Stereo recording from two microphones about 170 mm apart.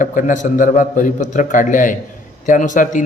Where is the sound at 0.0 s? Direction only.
50° left (ahead or behind).